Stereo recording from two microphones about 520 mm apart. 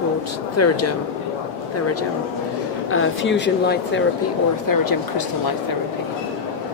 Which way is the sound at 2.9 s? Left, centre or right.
Left.